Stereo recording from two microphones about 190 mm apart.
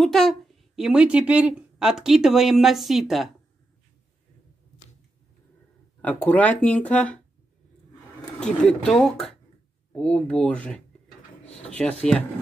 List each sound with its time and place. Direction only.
0.0 s a woman's voice: centre (ahead or behind)
6.0 s speech: 10° left (ahead or behind)
8.4 s a woman's voice: 5° left (ahead or behind)
12.0 s speech: 5° left (ahead or behind)